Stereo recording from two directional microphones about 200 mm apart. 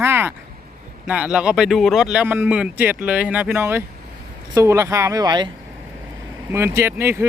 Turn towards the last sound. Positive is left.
turn(degrees=-10)  # may be behind; listen again after turning